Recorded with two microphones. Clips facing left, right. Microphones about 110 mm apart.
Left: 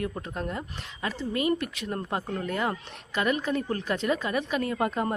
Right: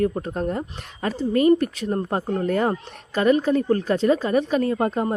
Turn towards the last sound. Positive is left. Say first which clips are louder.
# right 6 dB
turn(degrees=-30)  # may be behind; listen again after turning